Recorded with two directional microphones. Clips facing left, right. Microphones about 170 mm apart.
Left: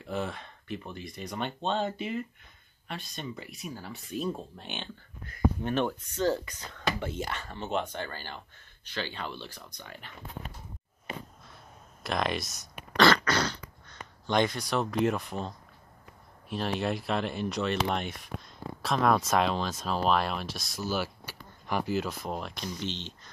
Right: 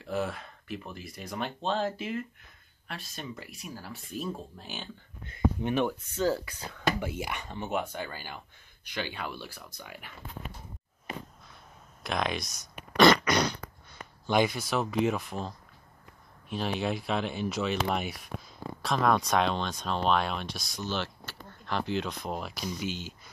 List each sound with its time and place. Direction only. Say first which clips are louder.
0.0 s speech: right 2 dB; 5° right (ahead or behind)
5.2 s speech: even; 20° right (ahead or behind)
12.0 s speech: left 1 dB; centre (ahead or behind)
12.9 s throat clearing: right 2 dB; 15° right (ahead or behind)
16.4 s speech: even; centre (ahead or behind)